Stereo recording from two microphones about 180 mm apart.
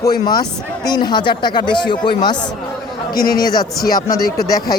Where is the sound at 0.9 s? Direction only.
25° left (ahead or behind).